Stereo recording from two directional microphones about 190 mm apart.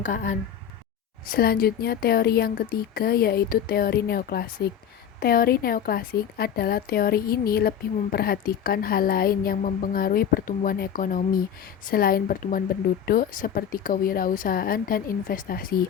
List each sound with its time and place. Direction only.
0.0 s speech: 40° left (ahead or behind)